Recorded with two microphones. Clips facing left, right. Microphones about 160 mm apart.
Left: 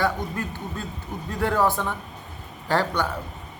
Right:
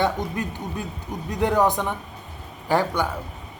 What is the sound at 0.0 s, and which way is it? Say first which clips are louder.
A man's voice: right 2 dB; 20° right (ahead or behind).